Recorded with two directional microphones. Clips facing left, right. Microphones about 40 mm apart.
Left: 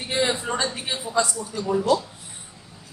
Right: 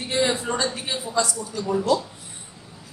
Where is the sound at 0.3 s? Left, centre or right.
Centre.